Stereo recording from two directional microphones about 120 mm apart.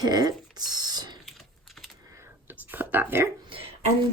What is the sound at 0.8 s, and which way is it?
Typing, 35° right (ahead or behind).